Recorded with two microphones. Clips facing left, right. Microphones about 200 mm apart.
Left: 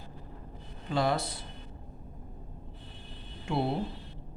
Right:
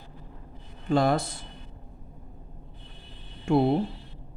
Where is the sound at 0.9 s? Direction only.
50° right (ahead or behind).